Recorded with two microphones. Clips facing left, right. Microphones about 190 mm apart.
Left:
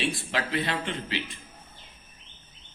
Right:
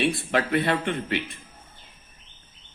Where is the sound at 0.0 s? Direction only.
55° right (ahead or behind).